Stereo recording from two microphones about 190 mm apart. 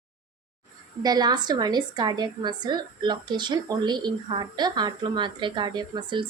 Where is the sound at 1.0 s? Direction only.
20° right (ahead or behind).